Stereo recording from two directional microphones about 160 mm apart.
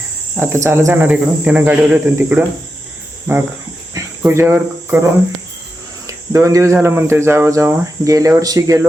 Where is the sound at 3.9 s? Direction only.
15° right (ahead or behind).